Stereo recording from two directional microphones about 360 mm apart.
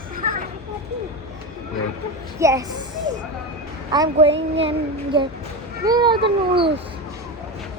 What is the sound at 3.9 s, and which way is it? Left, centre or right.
Speech, centre.